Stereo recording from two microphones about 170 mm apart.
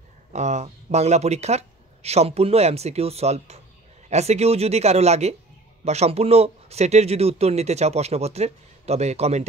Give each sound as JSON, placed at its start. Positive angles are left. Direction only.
{"t": 0.3, "sound": "speech", "side_deg": -40}